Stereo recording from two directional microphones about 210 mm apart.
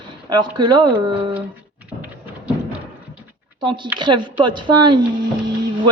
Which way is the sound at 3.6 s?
20° right (ahead or behind).